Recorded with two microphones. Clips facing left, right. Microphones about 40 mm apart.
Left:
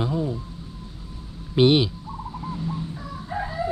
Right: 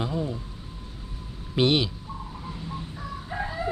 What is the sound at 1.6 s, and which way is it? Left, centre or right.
Speech, left.